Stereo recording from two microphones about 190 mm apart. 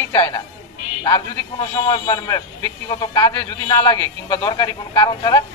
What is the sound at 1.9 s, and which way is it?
A man's voice, 20° left (ahead or behind).